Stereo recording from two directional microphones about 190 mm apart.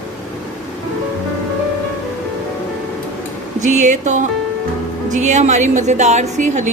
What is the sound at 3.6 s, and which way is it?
A woman's voice, 40° right (ahead or behind).